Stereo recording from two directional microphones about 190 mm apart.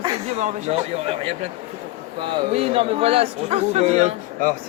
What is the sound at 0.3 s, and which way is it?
Speech, 35° right (ahead or behind).